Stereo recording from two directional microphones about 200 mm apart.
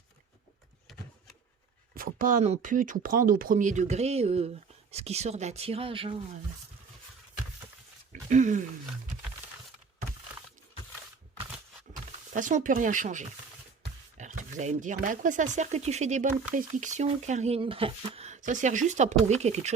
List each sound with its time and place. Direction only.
2.0 s speech: 45° right (ahead or behind); by 6.4 s 25° right (ahead or behind)
8.3 s speech: 40° right (ahead or behind)
12.3 s speech: 40° right (ahead or behind)